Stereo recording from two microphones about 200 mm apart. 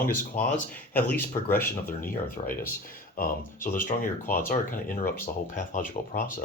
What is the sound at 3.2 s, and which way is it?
Speech, 45° left (ahead or behind).